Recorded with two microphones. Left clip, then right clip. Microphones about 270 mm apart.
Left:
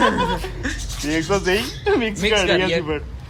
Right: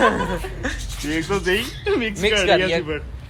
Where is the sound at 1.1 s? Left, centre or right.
Left.